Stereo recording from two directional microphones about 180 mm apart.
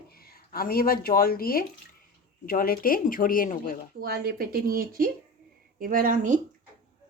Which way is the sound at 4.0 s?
60° right (ahead or behind).